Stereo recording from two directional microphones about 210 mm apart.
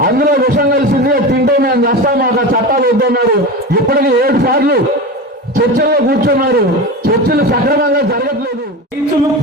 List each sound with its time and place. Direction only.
0.0 s a man's voice: 45° right (ahead or behind)